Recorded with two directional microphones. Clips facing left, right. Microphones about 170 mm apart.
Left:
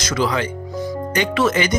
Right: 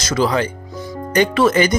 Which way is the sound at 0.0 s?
35° right (ahead or behind).